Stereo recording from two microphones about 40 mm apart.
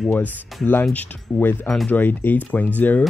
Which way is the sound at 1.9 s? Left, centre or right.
Left.